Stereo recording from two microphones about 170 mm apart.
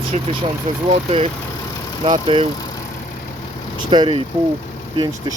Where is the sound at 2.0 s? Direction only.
35° right (ahead or behind).